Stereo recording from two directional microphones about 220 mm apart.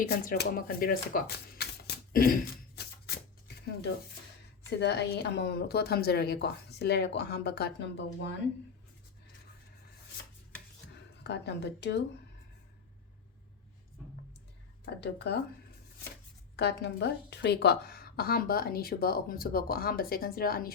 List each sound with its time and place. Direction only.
0.1 s speech: 45° left (ahead or behind)
2.1 s throat clearing: 40° left (ahead or behind)
3.4 s a sound: 45° left (ahead or behind)
4.8 s a woman's voice: 50° left (ahead or behind)
10.9 s speech: 50° left (ahead or behind)
14.0 s a sound: 5° left (ahead or behind)
15.0 s a woman's voice: 50° left (ahead or behind)
16.6 s a woman's voice: 50° left (ahead or behind)